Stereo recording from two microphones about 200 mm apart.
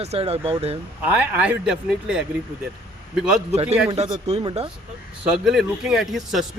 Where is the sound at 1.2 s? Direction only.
5° right (ahead or behind).